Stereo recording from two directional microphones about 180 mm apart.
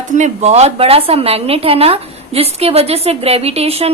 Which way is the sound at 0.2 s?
40° right (ahead or behind).